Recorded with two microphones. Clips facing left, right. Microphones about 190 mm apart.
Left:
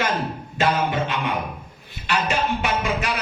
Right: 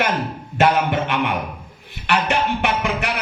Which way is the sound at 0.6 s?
60° right (ahead or behind).